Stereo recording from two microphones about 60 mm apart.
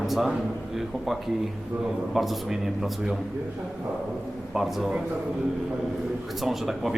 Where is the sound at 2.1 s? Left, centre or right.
Centre.